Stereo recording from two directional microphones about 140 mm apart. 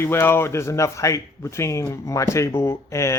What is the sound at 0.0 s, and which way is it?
A man's voice, 15° left (ahead or behind).